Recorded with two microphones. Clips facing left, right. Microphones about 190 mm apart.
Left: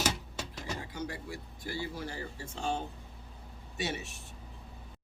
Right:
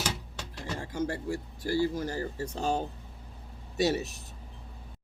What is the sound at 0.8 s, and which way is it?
Speech, 45° right (ahead or behind).